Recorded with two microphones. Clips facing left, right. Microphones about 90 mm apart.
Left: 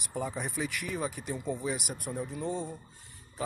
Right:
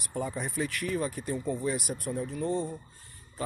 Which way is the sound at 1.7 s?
75° left (ahead or behind).